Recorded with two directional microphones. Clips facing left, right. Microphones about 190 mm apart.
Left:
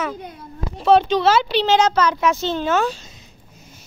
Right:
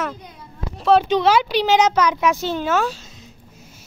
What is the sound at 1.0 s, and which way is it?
Speech, 10° right (ahead or behind).